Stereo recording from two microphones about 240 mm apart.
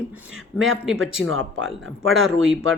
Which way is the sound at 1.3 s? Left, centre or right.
Right.